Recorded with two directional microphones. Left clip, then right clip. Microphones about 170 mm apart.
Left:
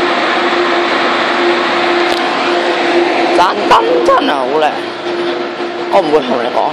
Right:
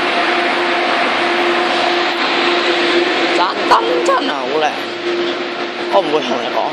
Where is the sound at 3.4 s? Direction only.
15° left (ahead or behind).